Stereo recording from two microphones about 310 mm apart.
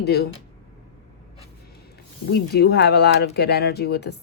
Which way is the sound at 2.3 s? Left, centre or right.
Left.